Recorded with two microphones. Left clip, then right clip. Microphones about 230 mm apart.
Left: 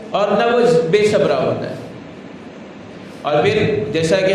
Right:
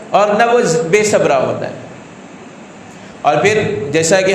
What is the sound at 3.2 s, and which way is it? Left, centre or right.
A man's voice, right.